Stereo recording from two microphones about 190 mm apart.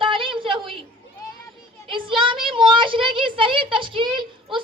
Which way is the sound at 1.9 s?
25° right (ahead or behind).